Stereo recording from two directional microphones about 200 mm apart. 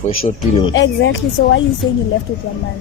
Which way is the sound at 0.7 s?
65° left (ahead or behind).